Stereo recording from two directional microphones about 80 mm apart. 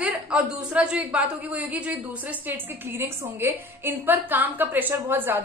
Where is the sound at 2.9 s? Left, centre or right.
Right.